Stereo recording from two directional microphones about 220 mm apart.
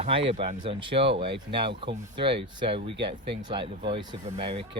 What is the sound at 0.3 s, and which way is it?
Speech, 25° right (ahead or behind).